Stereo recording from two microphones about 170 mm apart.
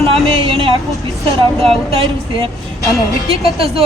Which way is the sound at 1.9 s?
35° right (ahead or behind).